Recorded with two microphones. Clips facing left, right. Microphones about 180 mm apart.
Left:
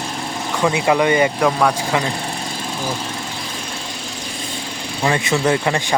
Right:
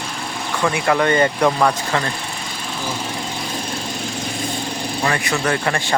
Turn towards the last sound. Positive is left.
turn(degrees=15)  # may be behind; listen again after turning